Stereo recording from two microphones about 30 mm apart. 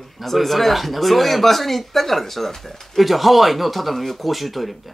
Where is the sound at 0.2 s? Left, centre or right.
Centre.